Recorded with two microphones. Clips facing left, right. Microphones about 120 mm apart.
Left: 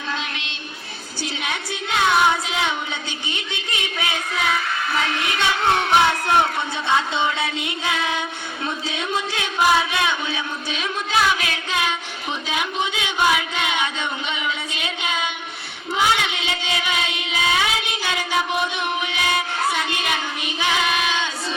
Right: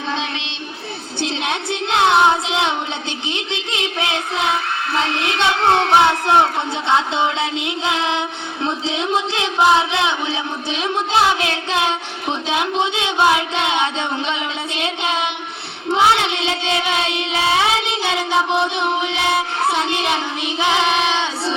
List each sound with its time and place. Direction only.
1.2 s child singing: 25° right (ahead or behind)